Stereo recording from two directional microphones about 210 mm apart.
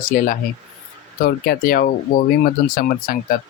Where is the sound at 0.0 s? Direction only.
40° left (ahead or behind).